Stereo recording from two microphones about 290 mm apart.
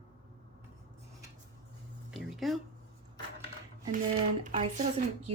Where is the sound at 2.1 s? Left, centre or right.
Centre.